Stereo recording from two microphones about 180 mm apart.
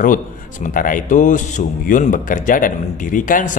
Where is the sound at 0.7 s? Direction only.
50° left (ahead or behind).